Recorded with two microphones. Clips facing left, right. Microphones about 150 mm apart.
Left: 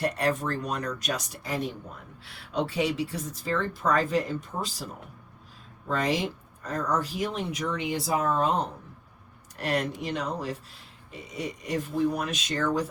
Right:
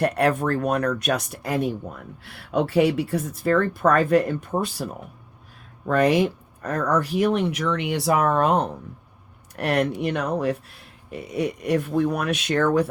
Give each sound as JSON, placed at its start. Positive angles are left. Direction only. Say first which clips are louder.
{"t": 0.0, "sound": "speech", "louder": "right 6 dB", "side_deg": -60}
{"t": 5.9, "sound": "speech", "louder": "right 8 dB", "side_deg": -65}